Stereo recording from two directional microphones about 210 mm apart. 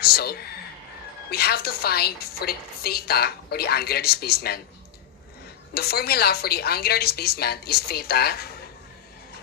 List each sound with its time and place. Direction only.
0.0 s a woman's voice: 45° left (ahead or behind)
5.7 s a woman's voice: 45° left (ahead or behind)